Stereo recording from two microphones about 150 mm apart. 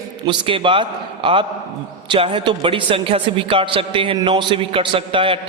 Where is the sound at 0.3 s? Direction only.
35° right (ahead or behind).